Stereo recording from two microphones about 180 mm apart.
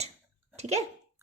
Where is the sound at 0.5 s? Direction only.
35° right (ahead or behind).